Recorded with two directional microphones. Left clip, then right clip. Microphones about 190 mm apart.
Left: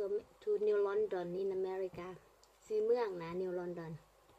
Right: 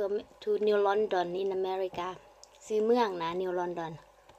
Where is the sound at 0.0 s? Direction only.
10° left (ahead or behind).